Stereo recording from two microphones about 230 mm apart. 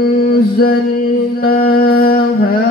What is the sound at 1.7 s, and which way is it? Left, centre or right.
Humming, left.